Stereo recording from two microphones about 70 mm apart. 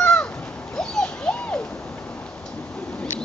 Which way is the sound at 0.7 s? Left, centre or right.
Centre.